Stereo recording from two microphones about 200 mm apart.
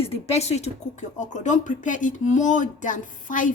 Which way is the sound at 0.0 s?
30° left (ahead or behind).